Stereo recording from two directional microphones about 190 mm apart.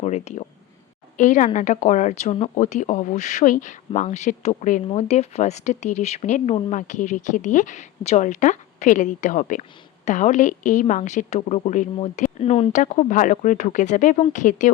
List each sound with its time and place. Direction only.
0.0 s a woman's voice: 35° left (ahead or behind)